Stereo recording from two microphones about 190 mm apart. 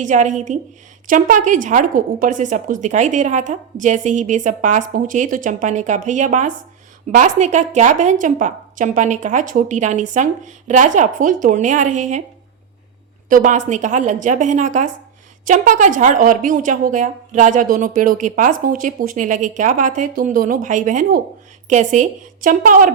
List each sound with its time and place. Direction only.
0.0 s a woman's voice: 40° right (ahead or behind)
13.2 s a woman's voice: 45° right (ahead or behind)